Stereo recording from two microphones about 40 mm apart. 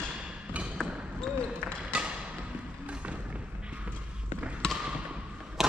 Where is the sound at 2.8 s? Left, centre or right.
Right.